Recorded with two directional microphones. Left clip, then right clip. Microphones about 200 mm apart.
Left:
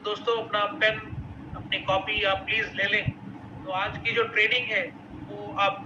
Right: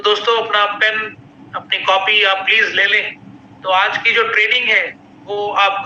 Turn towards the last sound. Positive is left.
turn(degrees=-40)  # may be behind; listen again after turning